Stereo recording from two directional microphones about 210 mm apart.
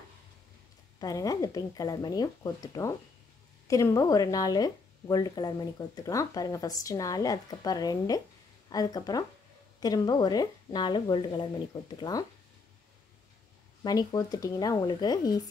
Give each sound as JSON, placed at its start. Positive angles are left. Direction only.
{"t": 0.9, "sound": "speech", "side_deg": 15}
{"t": 13.8, "sound": "speech", "side_deg": 20}